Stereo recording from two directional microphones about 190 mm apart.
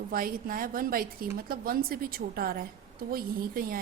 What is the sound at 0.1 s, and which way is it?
A woman's voice, 50° right (ahead or behind).